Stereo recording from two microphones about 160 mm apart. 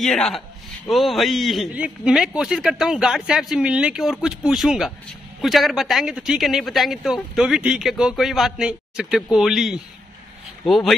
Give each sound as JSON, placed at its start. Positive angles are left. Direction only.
{"t": 0.0, "sound": "speech", "side_deg": 0}